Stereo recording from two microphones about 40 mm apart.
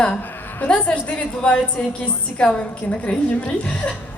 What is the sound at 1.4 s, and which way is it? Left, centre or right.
A woman's voice, left.